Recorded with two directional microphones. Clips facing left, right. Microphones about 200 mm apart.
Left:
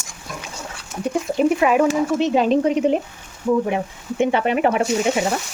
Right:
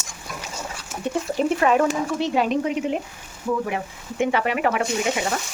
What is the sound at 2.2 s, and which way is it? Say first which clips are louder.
Speech: left 3 dB; 20° left (ahead or behind).